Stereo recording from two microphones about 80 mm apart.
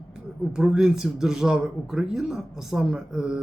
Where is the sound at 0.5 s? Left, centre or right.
Centre.